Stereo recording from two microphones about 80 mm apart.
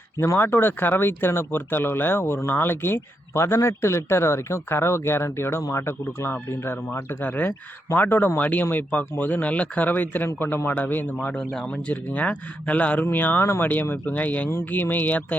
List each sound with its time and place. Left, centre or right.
0.2 s speech: left
7.3 s speech: left
11.2 s speech: centre